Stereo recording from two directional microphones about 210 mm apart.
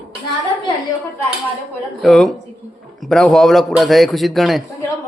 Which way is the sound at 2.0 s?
Centre (ahead or behind).